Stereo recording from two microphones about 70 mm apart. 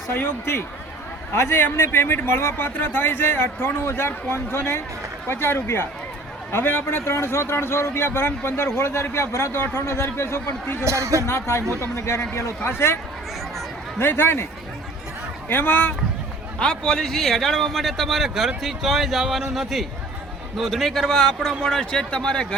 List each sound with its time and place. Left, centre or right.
0.1 s a man's voice: left
10.8 s a man's voice: right
11.3 s a man's voice: left
14.0 s a man's voice: left
15.4 s speech: left
16.6 s a man's voice: centre